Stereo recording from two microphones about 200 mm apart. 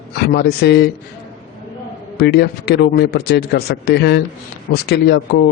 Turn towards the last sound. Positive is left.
turn(degrees=55)  # may be behind; listen again after turning